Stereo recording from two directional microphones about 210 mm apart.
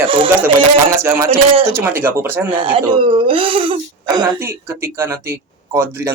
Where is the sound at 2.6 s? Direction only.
25° right (ahead or behind).